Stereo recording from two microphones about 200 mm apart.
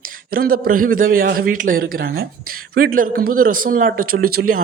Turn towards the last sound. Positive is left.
turn(degrees=-50)  # may be behind; listen again after turning